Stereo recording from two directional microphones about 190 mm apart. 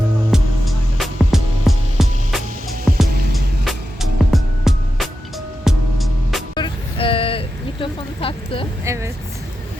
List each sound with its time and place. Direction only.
0.3 s music: centre (ahead or behind)
3.1 s music: 55° right (ahead or behind)
3.3 s music: centre (ahead or behind)
6.5 s vehicle: 25° left (ahead or behind)
8.8 s vehicle: 15° right (ahead or behind)